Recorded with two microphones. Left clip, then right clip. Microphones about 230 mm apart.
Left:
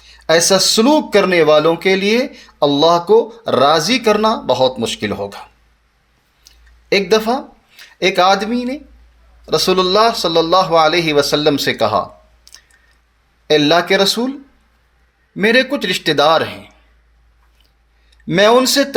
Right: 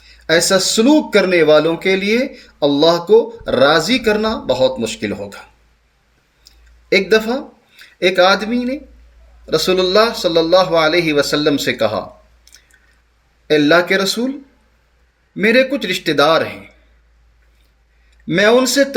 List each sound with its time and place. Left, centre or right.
0.5 s speech: left
7.1 s speech: left
13.5 s speech: left
15.4 s speech: left
18.3 s speech: left